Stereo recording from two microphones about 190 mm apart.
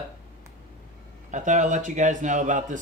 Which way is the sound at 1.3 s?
40° right (ahead or behind).